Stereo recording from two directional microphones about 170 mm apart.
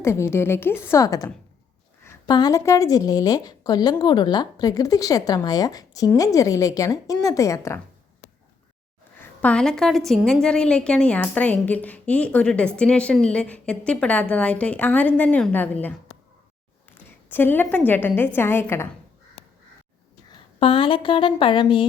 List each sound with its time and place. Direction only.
0.0 s a woman's voice: 15° left (ahead or behind)
9.1 s a woman's voice: 5° left (ahead or behind)
20.6 s a woman's voice: 35° left (ahead or behind)